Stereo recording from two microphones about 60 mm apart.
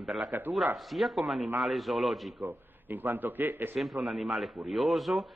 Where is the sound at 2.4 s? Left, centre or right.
Right.